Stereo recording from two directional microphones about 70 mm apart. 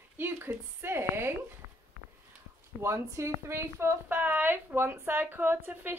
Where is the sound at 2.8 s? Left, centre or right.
Right.